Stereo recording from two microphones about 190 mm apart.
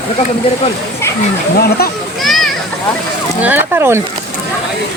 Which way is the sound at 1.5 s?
55° left (ahead or behind).